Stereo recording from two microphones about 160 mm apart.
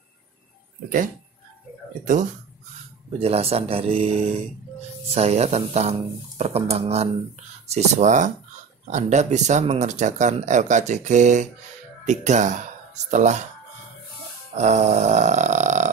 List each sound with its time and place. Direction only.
0.8 s speech: 55° right (ahead or behind)
3.1 s speech: 40° right (ahead or behind)
14.5 s speech: 45° right (ahead or behind)